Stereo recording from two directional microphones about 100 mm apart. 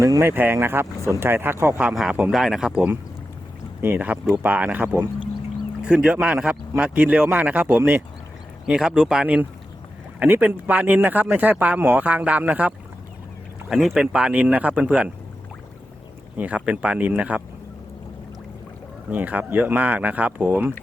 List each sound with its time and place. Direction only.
0.0 s speech: 30° right (ahead or behind)
2.0 s speech: 5° right (ahead or behind)
3.8 s speech: 20° right (ahead or behind)
13.7 s speech: centre (ahead or behind)
16.4 s speech: 15° right (ahead or behind)
19.1 s speech: 15° right (ahead or behind)